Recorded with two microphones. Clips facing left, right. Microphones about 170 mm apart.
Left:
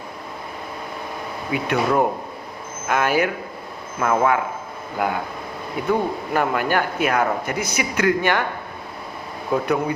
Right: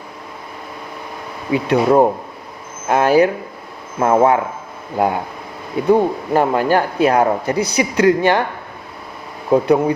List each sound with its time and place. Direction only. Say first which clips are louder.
1.5 s speech: right 7 dB; 30° right (ahead or behind)
9.5 s speech: right 7 dB; 30° right (ahead or behind)